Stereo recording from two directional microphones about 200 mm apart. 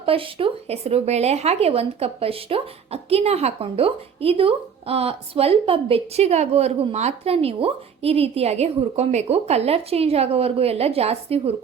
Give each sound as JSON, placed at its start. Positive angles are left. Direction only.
{"t": 0.0, "sound": "speech", "side_deg": -25}